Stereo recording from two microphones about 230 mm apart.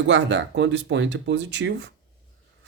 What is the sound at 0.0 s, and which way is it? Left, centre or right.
Speech, right.